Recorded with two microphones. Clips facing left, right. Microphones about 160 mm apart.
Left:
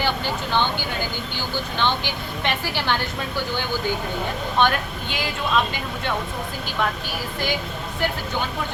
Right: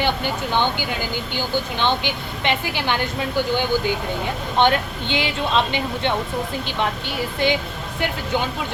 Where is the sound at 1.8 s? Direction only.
15° right (ahead or behind).